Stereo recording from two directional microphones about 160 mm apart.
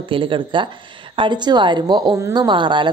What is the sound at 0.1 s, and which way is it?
A woman's voice, 30° right (ahead or behind).